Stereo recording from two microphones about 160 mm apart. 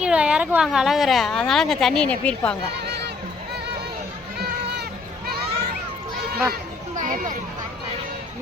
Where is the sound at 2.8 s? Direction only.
90° right.